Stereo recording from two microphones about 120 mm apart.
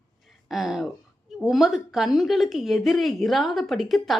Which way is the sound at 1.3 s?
5° right (ahead or behind).